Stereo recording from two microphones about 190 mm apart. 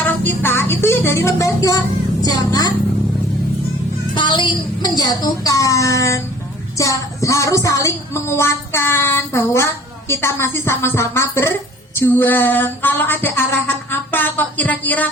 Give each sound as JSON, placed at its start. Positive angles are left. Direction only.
{"t": 0.3, "sound": "music", "side_deg": 10}
{"t": 2.2, "sound": "a woman's voice", "side_deg": 20}
{"t": 4.1, "sound": "a woman's voice", "side_deg": 25}
{"t": 6.7, "sound": "music", "side_deg": 15}